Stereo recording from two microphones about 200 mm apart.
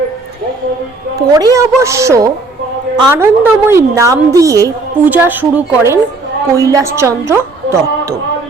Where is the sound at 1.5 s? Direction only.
15° right (ahead or behind).